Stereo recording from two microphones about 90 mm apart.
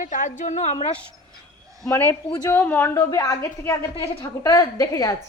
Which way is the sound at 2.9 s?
35° left (ahead or behind).